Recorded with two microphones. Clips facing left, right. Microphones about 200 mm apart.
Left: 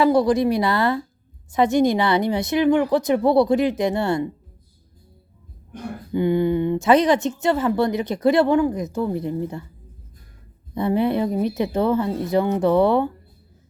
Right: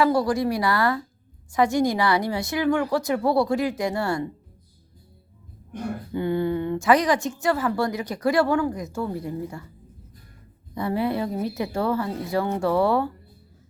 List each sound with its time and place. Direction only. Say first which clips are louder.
0.0 s speech: left 4 dB; 20° left (ahead or behind)
6.1 s speech: left 5 dB; 15° left (ahead or behind)
10.8 s speech: left 5 dB; 20° left (ahead or behind)